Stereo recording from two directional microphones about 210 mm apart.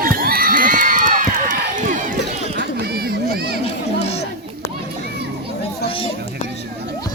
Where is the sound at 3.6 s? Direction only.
30° left (ahead or behind).